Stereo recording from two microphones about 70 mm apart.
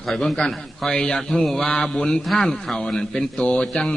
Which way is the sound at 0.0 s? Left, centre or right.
Centre.